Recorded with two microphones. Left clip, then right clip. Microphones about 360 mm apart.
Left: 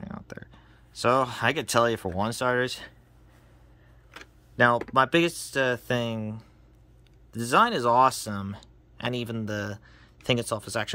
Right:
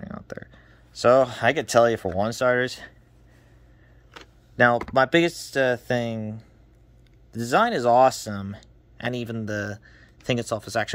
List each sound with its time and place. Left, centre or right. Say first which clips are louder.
0.0 s a sound: right 4 dB; centre
2.1 s speech: right 4 dB; centre
4.2 s speech: right 3 dB; centre